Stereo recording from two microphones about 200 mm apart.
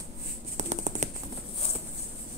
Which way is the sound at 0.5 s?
35° right (ahead or behind).